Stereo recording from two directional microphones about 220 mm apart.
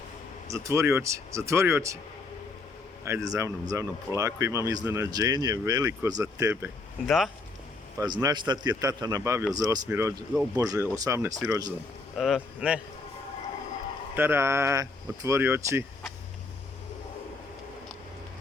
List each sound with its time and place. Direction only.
0.4 s speech: 15° right (ahead or behind)
3.0 s speech: 15° right (ahead or behind)
7.9 s speech: 15° right (ahead or behind)
12.1 s speech: centre (ahead or behind)
14.2 s speech: 10° right (ahead or behind)